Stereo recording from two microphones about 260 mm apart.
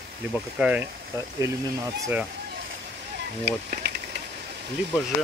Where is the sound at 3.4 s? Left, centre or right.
Right.